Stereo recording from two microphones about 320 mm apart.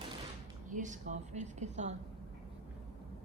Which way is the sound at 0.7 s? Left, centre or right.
Right.